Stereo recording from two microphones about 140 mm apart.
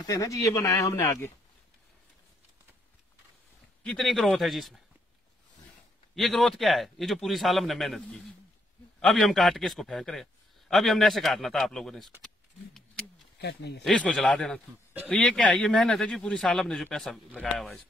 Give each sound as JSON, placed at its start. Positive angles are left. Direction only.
{"t": 0.0, "sound": "speech", "side_deg": 25}
{"t": 3.8, "sound": "a man's voice", "side_deg": 5}
{"t": 6.1, "sound": "a man's voice", "side_deg": 0}
{"t": 13.8, "sound": "a man's voice", "side_deg": 5}